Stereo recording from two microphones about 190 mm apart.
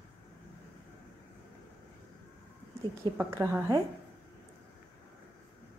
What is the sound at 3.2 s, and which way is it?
Speech, 15° right (ahead or behind).